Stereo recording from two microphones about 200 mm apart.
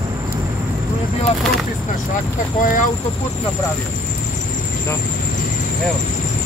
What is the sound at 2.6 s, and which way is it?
Speech, 40° left (ahead or behind).